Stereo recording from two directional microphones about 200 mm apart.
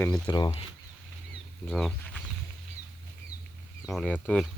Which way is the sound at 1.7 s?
5° left (ahead or behind).